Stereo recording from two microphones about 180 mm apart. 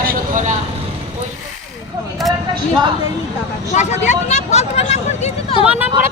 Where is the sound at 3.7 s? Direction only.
40° left (ahead or behind).